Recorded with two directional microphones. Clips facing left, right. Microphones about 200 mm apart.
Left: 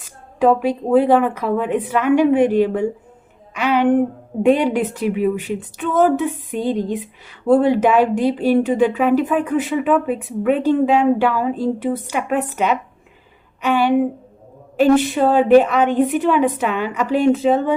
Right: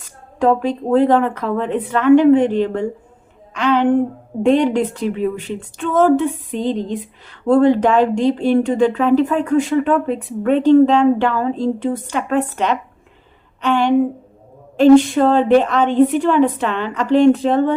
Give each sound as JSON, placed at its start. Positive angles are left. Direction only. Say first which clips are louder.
{"t": 0.3, "sound": "speech", "louder": "left 1 dB", "side_deg": 10}
{"t": 13.6, "sound": "a sound", "louder": "even", "side_deg": 10}
{"t": 14.8, "sound": "speech", "louder": "right 4 dB", "side_deg": 5}